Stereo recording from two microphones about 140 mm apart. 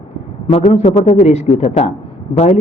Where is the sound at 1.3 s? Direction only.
50° left (ahead or behind).